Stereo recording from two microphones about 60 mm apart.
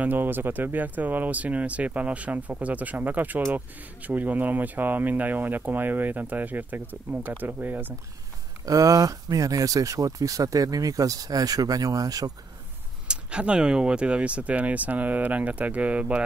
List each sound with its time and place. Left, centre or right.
0.0 s speech: right
8.6 s speech: right
13.1 s speech: centre